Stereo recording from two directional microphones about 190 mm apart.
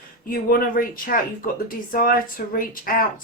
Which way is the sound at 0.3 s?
50° left (ahead or behind).